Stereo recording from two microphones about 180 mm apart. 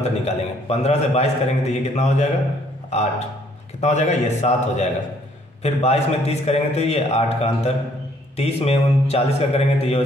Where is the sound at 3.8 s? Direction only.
40° left (ahead or behind).